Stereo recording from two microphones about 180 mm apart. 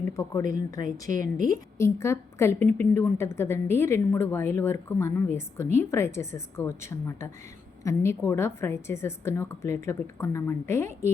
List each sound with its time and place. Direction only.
0.1 s a woman's voice: 20° left (ahead or behind)